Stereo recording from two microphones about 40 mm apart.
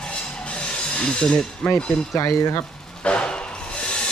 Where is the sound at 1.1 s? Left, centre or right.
Centre.